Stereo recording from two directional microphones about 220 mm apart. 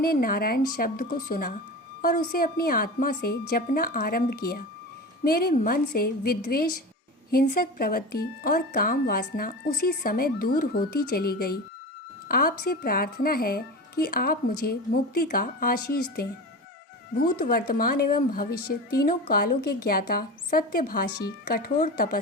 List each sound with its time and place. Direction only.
0.0 s a woman's voice: 40° left (ahead or behind)
17.3 s a woman's voice: 40° left (ahead or behind)